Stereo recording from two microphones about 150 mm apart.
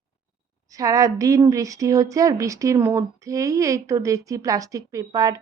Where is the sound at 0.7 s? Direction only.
25° right (ahead or behind).